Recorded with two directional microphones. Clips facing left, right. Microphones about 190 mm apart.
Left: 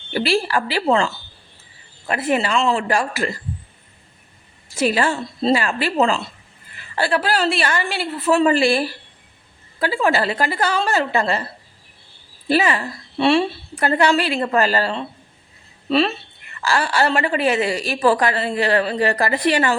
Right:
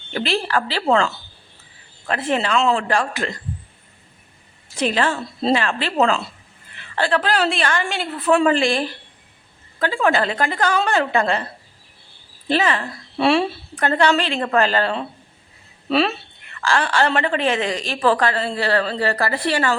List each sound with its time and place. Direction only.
0.1 s a woman's voice: 5° left (ahead or behind)
4.8 s a woman's voice: 5° left (ahead or behind)
12.5 s a woman's voice: 10° left (ahead or behind)
13.1 s speech: centre (ahead or behind)
13.8 s a woman's voice: 10° left (ahead or behind)